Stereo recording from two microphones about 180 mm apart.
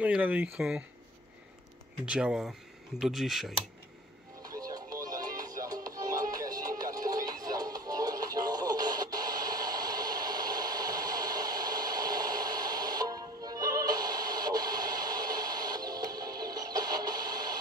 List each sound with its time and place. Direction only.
0.0 s speech: 5° right (ahead or behind)
2.0 s speech: 5° right (ahead or behind)
4.4 s music: 20° right (ahead or behind)